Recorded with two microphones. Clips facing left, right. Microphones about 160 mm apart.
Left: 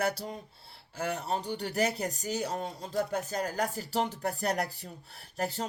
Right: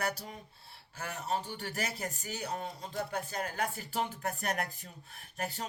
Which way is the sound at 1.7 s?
40° left (ahead or behind).